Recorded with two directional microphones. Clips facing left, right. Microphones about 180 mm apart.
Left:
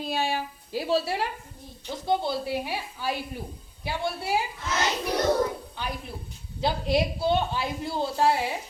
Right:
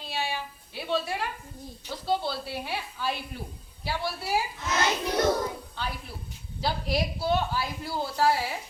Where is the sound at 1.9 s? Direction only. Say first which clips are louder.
Left 3 dB; 20° left (ahead or behind).